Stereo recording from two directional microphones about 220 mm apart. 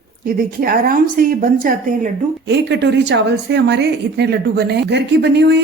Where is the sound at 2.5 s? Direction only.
50° right (ahead or behind).